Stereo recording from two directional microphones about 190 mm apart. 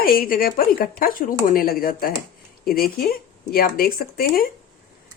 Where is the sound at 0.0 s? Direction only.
50° left (ahead or behind).